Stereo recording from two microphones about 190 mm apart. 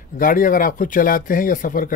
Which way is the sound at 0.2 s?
45° left (ahead or behind).